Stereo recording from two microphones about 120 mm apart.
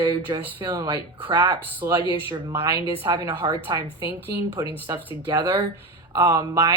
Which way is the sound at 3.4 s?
40° right (ahead or behind).